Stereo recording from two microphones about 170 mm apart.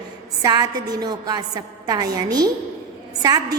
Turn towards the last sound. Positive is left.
turn(degrees=-25)  # may be behind; listen again after turning